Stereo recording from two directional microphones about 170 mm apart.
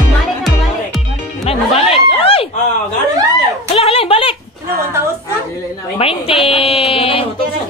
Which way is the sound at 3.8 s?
35° left (ahead or behind).